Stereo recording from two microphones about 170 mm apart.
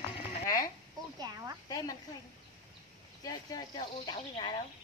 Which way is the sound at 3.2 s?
25° left (ahead or behind).